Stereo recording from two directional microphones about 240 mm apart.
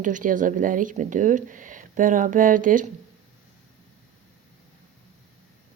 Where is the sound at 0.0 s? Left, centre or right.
Right.